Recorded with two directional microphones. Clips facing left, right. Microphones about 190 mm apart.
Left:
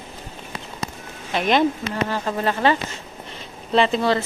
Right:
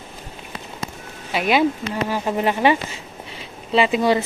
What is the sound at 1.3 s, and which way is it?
A woman's voice, 5° right (ahead or behind).